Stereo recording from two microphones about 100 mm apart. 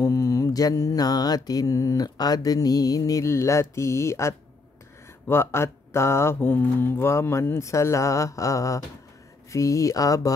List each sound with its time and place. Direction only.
0.0 s mantra: 35° left (ahead or behind)